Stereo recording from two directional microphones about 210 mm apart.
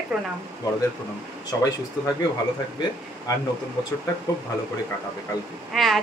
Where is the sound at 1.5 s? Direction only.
15° left (ahead or behind).